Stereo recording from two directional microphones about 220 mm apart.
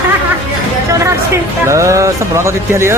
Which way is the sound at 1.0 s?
15° right (ahead or behind).